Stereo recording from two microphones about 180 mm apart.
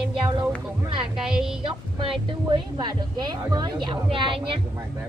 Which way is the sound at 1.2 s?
5° right (ahead or behind).